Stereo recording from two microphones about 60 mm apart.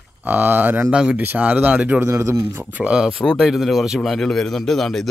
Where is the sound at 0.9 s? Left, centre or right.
Centre.